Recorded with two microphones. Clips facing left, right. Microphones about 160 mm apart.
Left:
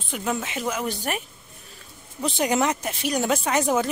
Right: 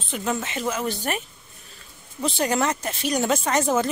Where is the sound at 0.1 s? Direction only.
5° left (ahead or behind).